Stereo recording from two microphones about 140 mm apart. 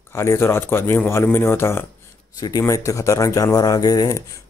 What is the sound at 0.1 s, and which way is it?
A man's voice, 20° left (ahead or behind).